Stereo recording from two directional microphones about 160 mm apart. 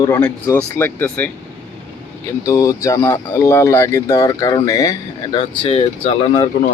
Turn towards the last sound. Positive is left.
turn(degrees=40)  # may be behind; listen again after turning